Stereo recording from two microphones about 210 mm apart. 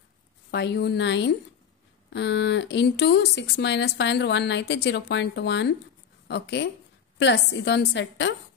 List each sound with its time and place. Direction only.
0.5 s speech: 55° left (ahead or behind)